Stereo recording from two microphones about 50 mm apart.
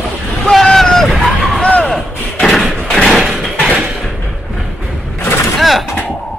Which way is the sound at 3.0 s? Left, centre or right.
Centre.